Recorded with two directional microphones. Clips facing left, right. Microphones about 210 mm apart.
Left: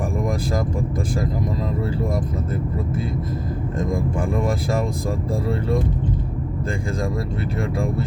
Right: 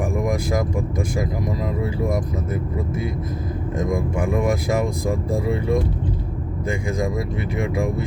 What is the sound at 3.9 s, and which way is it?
Speech, 15° right (ahead or behind).